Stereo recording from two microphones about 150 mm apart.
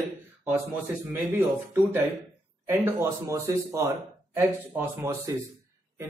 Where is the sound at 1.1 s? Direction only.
10° right (ahead or behind).